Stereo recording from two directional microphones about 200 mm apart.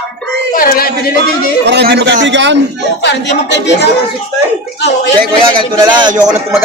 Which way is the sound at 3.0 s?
60° left (ahead or behind).